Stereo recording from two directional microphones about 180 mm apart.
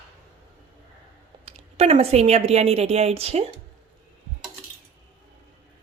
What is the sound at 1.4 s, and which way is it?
A woman's voice, 35° right (ahead or behind).